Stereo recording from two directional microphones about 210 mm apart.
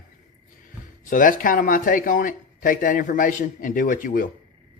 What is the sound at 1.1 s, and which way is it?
Speech, 40° left (ahead or behind).